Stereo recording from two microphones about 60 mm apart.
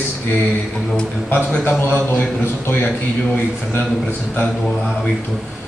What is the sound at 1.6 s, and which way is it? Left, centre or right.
Speech, left.